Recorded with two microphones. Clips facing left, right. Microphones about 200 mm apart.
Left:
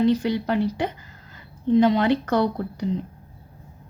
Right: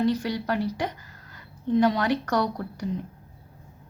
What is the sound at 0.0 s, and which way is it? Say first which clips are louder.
Speech: left 4 dB; 25° left (ahead or behind).